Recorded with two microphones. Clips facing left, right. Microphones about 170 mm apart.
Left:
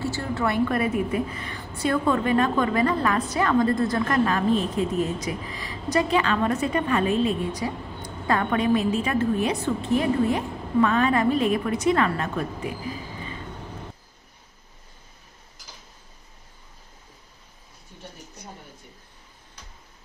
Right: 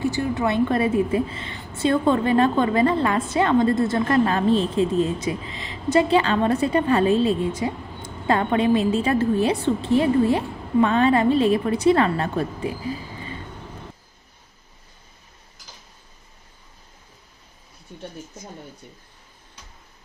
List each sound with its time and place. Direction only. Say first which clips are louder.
0.0 s a woman's voice: right 4 dB; 15° right (ahead or behind)